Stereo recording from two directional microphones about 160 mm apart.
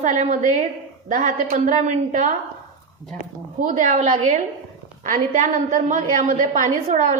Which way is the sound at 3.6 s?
55° right (ahead or behind).